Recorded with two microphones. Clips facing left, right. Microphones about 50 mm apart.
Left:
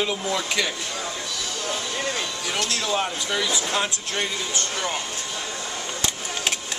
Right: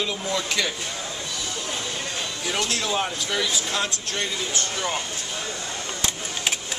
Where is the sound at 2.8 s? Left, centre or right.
Centre.